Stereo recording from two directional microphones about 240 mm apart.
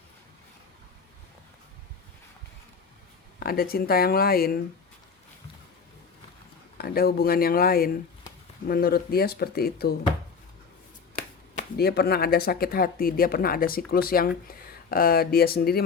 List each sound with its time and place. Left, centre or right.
3.4 s speech: left
6.7 s speech: left
11.1 s speech: left